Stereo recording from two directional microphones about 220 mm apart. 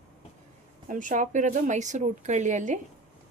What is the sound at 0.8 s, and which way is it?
A woman's voice, 35° right (ahead or behind).